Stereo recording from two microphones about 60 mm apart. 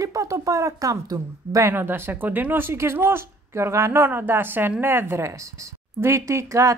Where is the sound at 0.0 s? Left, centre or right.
Right.